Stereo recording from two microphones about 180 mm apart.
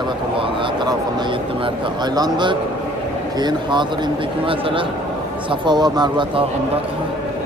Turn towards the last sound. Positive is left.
turn(degrees=-25)  # may be behind; listen again after turning